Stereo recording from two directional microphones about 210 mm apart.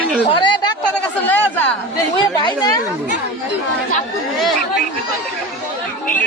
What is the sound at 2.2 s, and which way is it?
Speech, 20° left (ahead or behind).